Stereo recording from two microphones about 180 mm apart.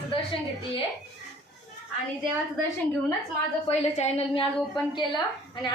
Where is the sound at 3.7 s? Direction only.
35° left (ahead or behind).